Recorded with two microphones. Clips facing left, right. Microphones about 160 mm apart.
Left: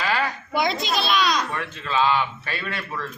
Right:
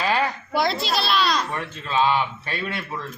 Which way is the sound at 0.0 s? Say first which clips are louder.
Right 2 dB; 20° right (ahead or behind).